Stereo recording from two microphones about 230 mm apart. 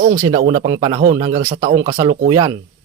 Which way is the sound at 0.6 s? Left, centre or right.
Centre.